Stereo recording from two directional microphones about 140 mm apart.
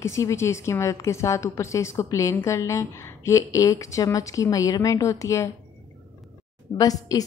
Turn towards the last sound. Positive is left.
turn(degrees=25)  # may be behind; listen again after turning